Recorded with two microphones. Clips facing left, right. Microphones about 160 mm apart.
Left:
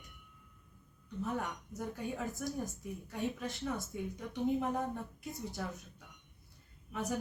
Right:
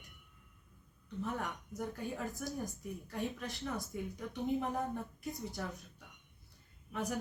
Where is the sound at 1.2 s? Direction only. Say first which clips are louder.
Left 2 dB; centre (ahead or behind).